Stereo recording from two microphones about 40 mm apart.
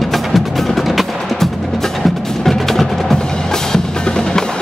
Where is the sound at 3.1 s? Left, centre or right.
Centre.